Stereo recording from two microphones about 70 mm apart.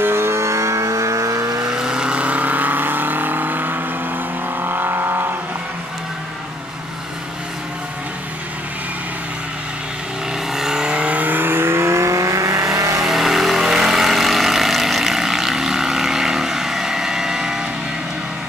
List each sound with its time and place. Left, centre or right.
0.0 s vehicle: right
1.7 s vehicle: centre; by 5.3 s right
10.5 s vehicle: centre; by 13.0 s right
13.0 s vehicle: centre